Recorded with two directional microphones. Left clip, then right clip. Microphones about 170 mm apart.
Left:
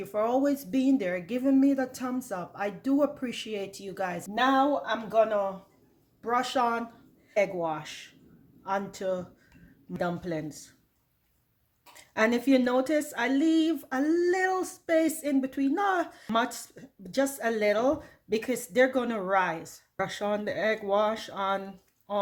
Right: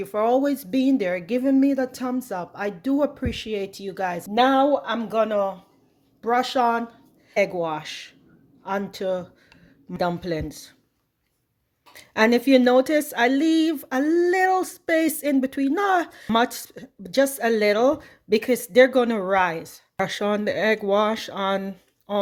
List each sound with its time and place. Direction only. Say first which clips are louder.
0.0 s speech: right 6 dB; 40° right (ahead or behind)
4.9 s speech: right 2 dB; 55° right (ahead or behind)
6.2 s speech: right 6 dB; 45° right (ahead or behind)
11.9 s a sound: right 7 dB; 50° right (ahead or behind)
12.5 s speech: right 8 dB; 50° right (ahead or behind)